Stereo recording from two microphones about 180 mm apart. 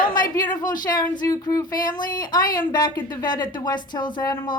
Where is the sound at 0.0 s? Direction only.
50° left (ahead or behind).